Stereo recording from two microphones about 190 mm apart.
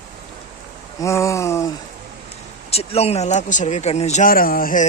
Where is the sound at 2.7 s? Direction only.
30° left (ahead or behind).